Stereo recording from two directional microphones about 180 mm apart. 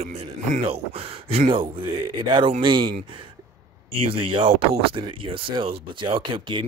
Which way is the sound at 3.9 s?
30° right (ahead or behind).